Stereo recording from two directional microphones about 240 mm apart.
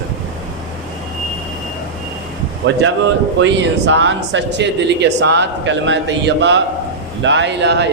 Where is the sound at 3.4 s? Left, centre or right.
Right.